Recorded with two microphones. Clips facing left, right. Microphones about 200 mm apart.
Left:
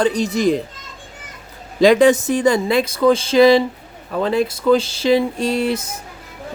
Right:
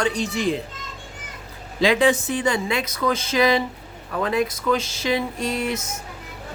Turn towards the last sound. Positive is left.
turn(degrees=30)  # may be behind; listen again after turning